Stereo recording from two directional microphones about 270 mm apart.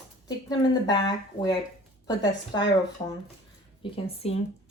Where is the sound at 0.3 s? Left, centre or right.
Centre.